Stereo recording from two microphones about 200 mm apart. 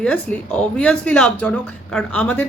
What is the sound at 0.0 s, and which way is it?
Speech, 5° left (ahead or behind).